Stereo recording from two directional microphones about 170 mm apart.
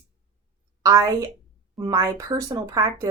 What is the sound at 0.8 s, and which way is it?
A woman's voice, 20° right (ahead or behind).